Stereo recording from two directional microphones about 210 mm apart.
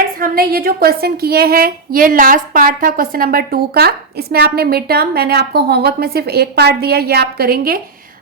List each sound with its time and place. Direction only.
0.2 s a woman's voice: 45° right (ahead or behind)